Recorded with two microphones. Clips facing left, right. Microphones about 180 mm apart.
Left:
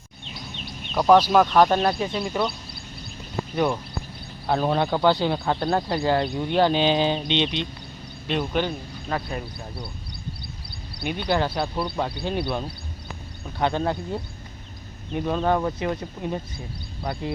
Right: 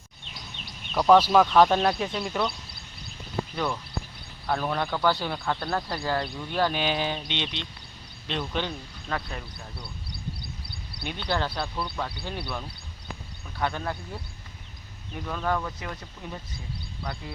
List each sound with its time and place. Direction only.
0.9 s speech: 5° left (ahead or behind)
4.4 s a man's voice: 25° left (ahead or behind)
11.1 s a man's voice: 15° left (ahead or behind)